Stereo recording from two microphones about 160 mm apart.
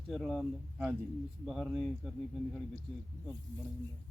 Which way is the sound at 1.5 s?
Centre (ahead or behind).